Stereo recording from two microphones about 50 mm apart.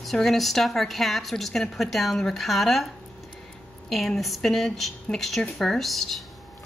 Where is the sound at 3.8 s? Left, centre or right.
Centre.